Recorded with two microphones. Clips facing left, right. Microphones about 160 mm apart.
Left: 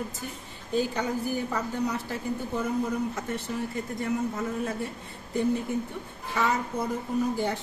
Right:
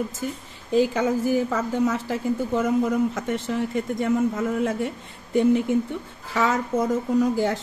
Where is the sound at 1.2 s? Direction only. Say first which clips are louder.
Right 7 dB; 90° right.